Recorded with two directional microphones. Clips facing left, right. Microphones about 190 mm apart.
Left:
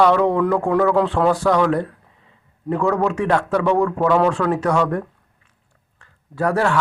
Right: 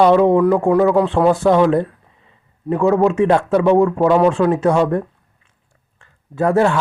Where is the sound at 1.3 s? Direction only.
25° right (ahead or behind).